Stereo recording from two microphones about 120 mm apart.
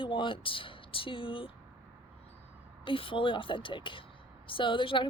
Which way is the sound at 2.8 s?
45° left (ahead or behind).